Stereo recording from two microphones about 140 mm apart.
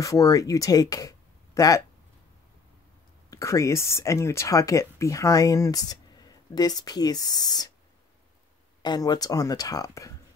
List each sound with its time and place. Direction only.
0.0 s speech: 25° left (ahead or behind)
3.3 s speech: 20° left (ahead or behind)
8.8 s speech: 30° left (ahead or behind)